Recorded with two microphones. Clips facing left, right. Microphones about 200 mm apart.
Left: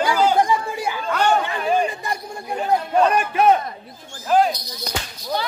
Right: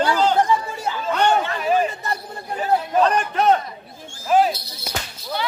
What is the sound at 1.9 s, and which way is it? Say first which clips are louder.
Speech: even; 15° left (ahead or behind).